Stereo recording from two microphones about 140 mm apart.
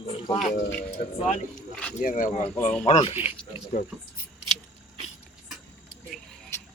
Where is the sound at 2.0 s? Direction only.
75° left (ahead or behind).